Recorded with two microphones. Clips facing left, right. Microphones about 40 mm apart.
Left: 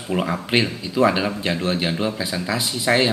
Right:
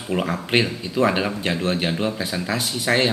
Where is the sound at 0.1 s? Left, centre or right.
Centre.